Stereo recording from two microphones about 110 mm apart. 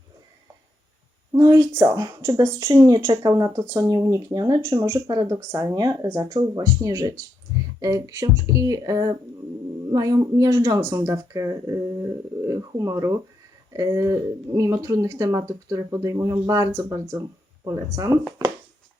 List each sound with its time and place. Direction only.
1.3 s speech: 30° right (ahead or behind)